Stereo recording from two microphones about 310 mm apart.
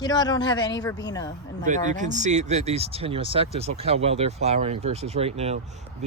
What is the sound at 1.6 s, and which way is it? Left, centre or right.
Speech, right.